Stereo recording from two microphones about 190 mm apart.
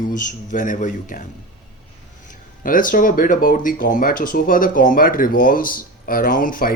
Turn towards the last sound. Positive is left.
turn(degrees=45)  # may be behind; listen again after turning